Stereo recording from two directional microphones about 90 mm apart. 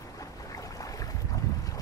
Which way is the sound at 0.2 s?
40° left (ahead or behind).